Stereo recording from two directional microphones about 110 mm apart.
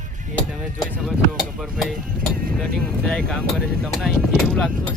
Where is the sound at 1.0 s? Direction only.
5° right (ahead or behind).